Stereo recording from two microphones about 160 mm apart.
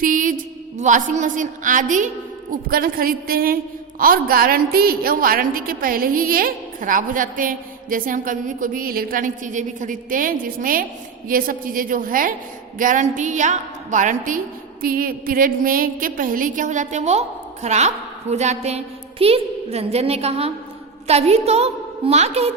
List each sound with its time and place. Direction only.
0.0 s a sound: 55° right (ahead or behind)
0.8 s a woman's voice: 50° right (ahead or behind)
2.5 s a woman's voice: 65° right (ahead or behind); by 22.5 s 40° right (ahead or behind)